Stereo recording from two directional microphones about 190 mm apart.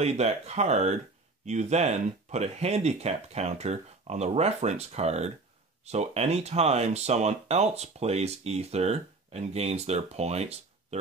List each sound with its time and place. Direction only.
0.0 s speech: 35° right (ahead or behind)